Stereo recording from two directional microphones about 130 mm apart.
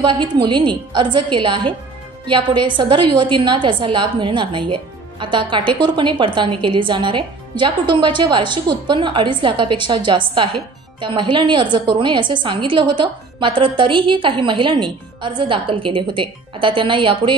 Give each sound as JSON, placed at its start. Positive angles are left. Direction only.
{"t": 0.0, "sound": "a woman's voice", "side_deg": -40}